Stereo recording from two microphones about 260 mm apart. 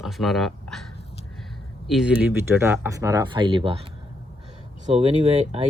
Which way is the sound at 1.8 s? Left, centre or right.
Centre.